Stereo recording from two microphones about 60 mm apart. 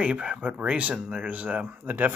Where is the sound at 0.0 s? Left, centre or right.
Centre.